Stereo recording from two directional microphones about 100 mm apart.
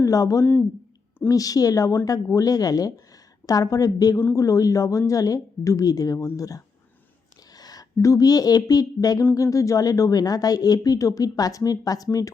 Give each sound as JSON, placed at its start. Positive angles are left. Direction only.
{"t": 0.0, "sound": "a woman's voice", "side_deg": 35}